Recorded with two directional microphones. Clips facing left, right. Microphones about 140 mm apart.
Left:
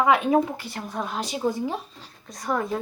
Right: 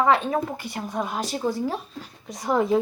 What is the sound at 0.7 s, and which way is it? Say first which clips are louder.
Speech: right 4 dB; 10° right (ahead or behind).